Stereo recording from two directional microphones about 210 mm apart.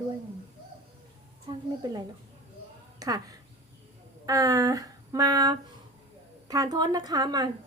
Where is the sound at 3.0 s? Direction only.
20° right (ahead or behind).